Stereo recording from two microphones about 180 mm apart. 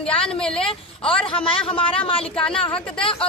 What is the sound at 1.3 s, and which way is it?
Speech, 30° left (ahead or behind).